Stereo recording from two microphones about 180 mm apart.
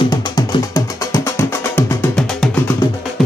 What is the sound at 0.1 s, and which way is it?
Music, 20° left (ahead or behind).